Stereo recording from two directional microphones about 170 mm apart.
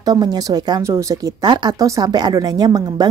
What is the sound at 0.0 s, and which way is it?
Speech, 25° right (ahead or behind).